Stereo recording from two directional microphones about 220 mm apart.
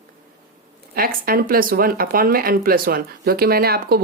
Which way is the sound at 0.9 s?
40° right (ahead or behind).